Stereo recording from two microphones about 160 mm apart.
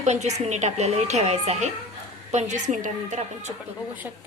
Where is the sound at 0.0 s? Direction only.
45° right (ahead or behind).